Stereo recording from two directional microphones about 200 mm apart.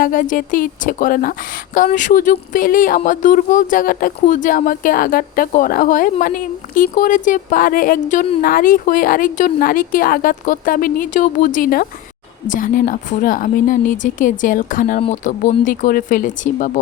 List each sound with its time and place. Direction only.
0.0 s speech: 45° left (ahead or behind)